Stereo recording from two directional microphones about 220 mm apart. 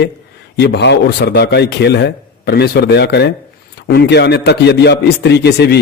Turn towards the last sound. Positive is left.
turn(degrees=50)  # may be behind; listen again after turning